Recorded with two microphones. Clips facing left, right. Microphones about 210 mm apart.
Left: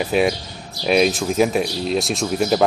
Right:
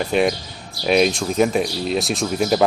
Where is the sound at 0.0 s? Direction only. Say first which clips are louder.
Even; centre (ahead or behind).